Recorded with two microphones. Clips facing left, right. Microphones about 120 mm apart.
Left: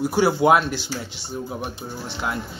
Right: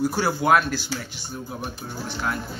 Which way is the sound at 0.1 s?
20° left (ahead or behind).